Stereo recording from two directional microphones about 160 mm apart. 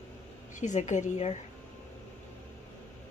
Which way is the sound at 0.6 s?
50° left (ahead or behind).